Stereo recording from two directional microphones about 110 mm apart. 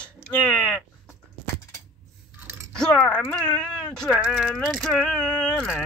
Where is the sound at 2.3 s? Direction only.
20° right (ahead or behind).